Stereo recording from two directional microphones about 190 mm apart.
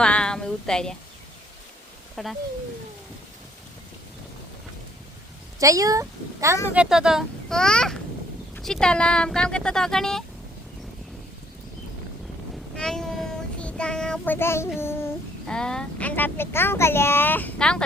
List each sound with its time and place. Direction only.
0.0 s a sound: 5° left (ahead or behind)
2.2 s speech: centre (ahead or behind)
5.5 s a woman's voice: 15° right (ahead or behind)
6.7 s speech: 5° right (ahead or behind)
12.7 s a sound: 5° left (ahead or behind)
13.6 s child singing: 5° left (ahead or behind)
14.8 s speech: 10° left (ahead or behind)